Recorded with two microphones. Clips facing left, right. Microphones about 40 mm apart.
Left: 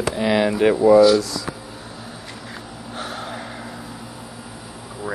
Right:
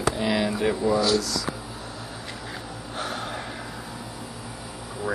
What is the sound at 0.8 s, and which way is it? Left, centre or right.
Speech, centre.